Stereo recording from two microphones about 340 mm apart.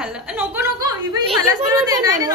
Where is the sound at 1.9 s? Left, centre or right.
Centre.